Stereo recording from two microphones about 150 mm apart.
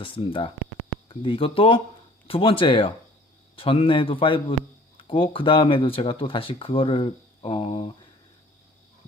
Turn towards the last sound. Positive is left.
turn(degrees=35)  # may be behind; listen again after turning